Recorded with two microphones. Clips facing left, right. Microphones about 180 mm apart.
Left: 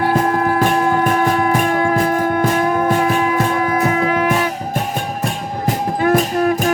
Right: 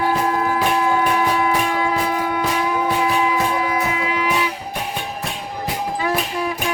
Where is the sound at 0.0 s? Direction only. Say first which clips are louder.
Left 4 dB; 45° left (ahead or behind).